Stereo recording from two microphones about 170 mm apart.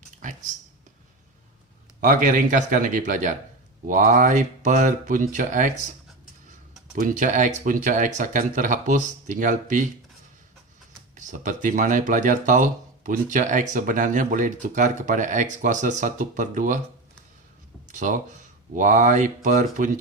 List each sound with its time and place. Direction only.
0.2 s a sound: 50° right (ahead or behind)
2.0 s speech: 50° right (ahead or behind)
6.9 s speech: 55° right (ahead or behind)
11.2 s speech: 45° right (ahead or behind)
17.8 s speech: 45° right (ahead or behind)